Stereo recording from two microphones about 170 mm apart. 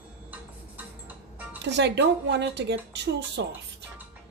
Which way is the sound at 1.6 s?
90° right.